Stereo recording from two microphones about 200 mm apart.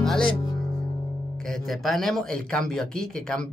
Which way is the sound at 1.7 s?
Centre (ahead or behind).